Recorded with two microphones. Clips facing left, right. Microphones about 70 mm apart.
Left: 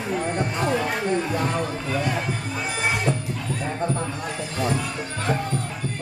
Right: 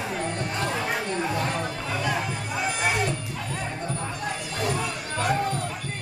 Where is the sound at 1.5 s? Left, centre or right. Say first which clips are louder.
Left 3 dB; left.